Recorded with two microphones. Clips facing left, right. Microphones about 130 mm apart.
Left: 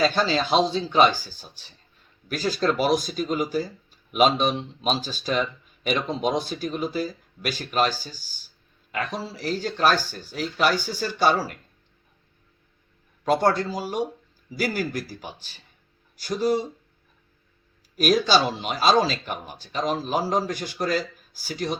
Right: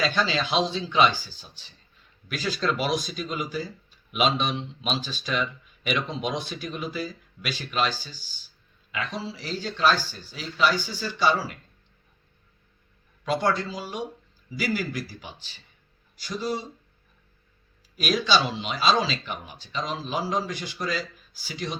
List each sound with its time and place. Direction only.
0.0 s speech: 40° left (ahead or behind)
13.2 s speech: 45° left (ahead or behind)
17.9 s speech: 45° left (ahead or behind)